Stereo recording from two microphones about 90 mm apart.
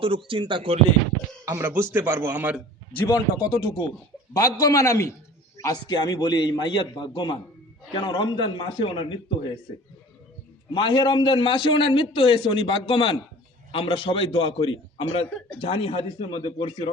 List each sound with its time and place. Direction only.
0.0 s speech: 80° right
1.5 s a man's voice: 25° right (ahead or behind)
3.1 s a man's voice: 45° left (ahead or behind); by 5.1 s 30° left (ahead or behind)
5.9 s a man's voice: 55° left (ahead or behind)
10.7 s a man's voice: 65° left (ahead or behind)
13.7 s a man's voice: 90° left